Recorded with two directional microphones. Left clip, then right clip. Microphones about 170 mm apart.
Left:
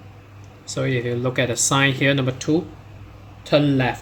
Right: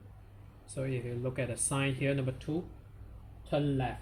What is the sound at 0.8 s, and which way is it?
Speech, 25° left (ahead or behind).